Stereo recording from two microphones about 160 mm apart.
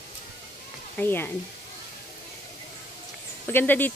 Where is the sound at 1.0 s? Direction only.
10° left (ahead or behind).